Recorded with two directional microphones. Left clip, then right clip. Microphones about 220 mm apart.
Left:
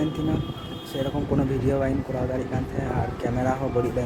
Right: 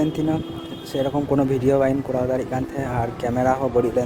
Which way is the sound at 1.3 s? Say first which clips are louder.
Right 6 dB; 30° right (ahead or behind).